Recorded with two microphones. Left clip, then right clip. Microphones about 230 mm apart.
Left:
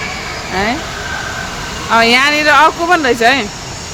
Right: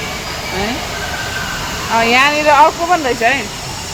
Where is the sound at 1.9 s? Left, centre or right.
Left.